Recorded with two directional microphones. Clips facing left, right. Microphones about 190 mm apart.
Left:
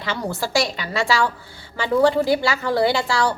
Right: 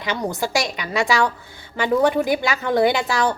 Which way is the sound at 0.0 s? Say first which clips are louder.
Right 2 dB; 15° right (ahead or behind).